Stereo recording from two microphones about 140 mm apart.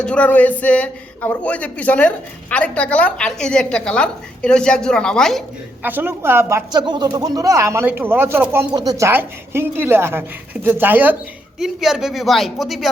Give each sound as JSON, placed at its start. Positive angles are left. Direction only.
{"t": 0.0, "sound": "speech", "side_deg": 10}
{"t": 5.8, "sound": "a woman's voice", "side_deg": -15}
{"t": 6.7, "sound": "a woman's voice", "side_deg": -30}
{"t": 11.6, "sound": "speech", "side_deg": -5}